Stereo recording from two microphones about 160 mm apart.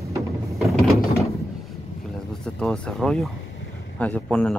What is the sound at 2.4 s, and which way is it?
Speech, 5° left (ahead or behind).